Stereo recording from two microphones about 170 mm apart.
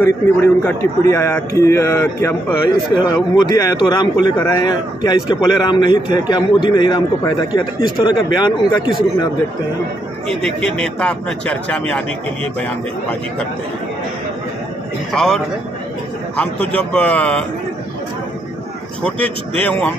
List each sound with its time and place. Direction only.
0.0 s a man's voice: 15° left (ahead or behind)
10.2 s speech: 5° left (ahead or behind)
15.1 s a man's voice: 5° left (ahead or behind)
19.0 s a man's voice: 10° left (ahead or behind)